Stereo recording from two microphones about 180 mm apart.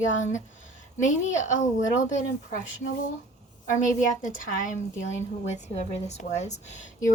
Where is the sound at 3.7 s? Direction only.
45° left (ahead or behind).